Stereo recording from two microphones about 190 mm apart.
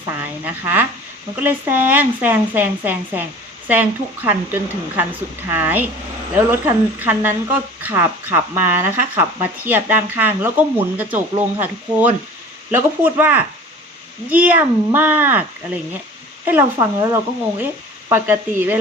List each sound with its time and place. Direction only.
0.2 s a woman's voice: 10° right (ahead or behind)
16.5 s a woman's voice: 15° right (ahead or behind)